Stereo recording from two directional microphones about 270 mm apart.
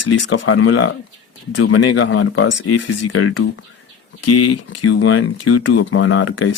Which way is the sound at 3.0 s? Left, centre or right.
Left.